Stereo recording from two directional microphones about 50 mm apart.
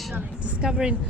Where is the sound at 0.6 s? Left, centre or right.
Centre.